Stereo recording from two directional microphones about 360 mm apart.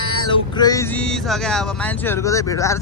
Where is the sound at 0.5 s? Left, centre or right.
Centre.